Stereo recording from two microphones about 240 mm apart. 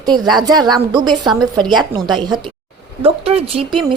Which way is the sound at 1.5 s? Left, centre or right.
Centre.